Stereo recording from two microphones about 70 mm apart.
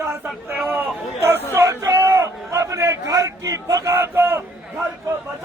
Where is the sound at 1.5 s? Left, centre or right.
Right.